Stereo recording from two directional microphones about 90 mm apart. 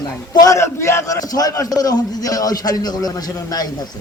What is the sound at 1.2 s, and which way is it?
A man's voice, 45° left (ahead or behind).